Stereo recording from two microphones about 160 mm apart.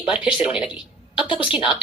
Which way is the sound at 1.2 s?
30° left (ahead or behind).